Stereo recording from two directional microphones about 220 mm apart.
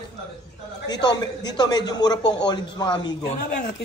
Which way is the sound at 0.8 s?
20° left (ahead or behind).